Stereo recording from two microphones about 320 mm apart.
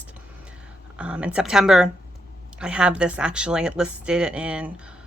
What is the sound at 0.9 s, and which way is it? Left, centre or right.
Speech, centre.